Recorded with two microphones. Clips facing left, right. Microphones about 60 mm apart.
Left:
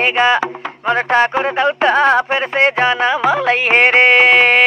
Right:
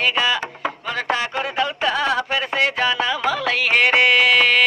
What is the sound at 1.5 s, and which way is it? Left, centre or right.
Music, left.